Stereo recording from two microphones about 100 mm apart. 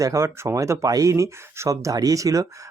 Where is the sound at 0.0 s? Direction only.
30° right (ahead or behind).